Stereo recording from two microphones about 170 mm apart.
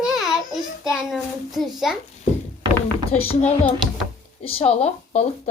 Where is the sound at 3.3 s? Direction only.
35° left (ahead or behind).